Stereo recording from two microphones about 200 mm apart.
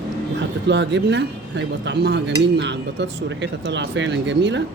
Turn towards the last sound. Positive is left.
turn(degrees=-60)  # may be behind; listen again after turning